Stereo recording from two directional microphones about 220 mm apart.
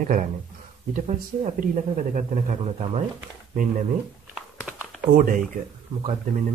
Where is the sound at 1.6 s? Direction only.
35° right (ahead or behind).